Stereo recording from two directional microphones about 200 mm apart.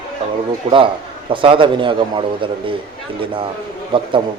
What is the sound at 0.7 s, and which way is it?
Speech, 30° right (ahead or behind).